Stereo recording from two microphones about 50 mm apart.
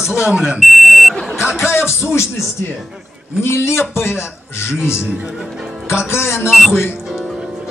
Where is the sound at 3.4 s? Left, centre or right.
Left.